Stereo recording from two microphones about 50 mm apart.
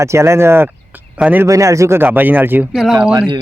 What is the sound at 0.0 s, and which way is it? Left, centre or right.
Speech, right.